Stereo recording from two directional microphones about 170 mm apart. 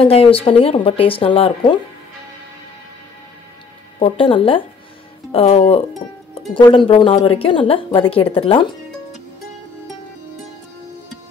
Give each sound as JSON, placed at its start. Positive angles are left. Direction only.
{"t": 0.0, "sound": "speech", "side_deg": 35}
{"t": 4.0, "sound": "speech", "side_deg": 30}